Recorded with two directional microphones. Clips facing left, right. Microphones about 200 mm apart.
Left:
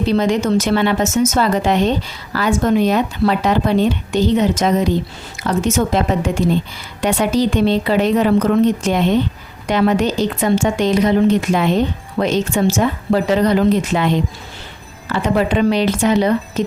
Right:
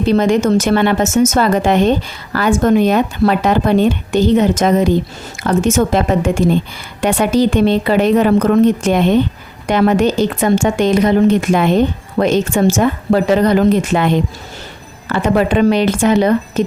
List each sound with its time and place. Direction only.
0.1 s speech: 50° right (ahead or behind)